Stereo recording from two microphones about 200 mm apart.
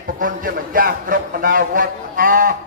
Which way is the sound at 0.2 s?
45° right (ahead or behind).